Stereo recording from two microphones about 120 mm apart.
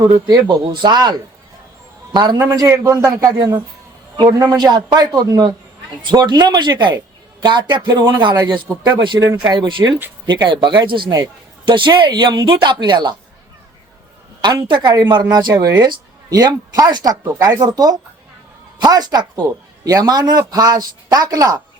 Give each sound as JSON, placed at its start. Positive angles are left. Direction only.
{"t": 0.0, "sound": "speech", "side_deg": -40}
{"t": 8.7, "sound": "speech", "side_deg": -20}
{"t": 9.2, "sound": "speech", "side_deg": -35}
{"t": 14.4, "sound": "speech", "side_deg": -35}